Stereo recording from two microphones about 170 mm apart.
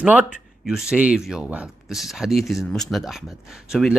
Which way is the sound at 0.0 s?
10° right (ahead or behind).